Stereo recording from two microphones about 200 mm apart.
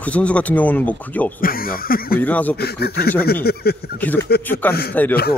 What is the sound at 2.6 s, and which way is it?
Speech, 50° left (ahead or behind).